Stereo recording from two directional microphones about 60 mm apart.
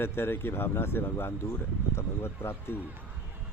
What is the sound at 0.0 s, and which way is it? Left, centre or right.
Speech, left.